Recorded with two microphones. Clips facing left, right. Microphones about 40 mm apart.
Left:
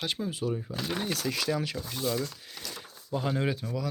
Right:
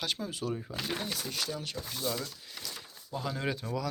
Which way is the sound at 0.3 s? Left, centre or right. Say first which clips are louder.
Left 4 dB; left.